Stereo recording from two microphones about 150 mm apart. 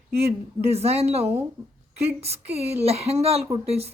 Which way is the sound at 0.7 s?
45° right (ahead or behind).